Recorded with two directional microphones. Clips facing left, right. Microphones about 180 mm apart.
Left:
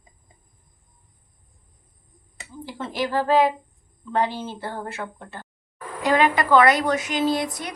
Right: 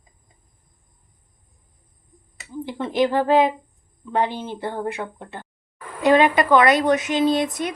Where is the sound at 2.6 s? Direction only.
20° right (ahead or behind).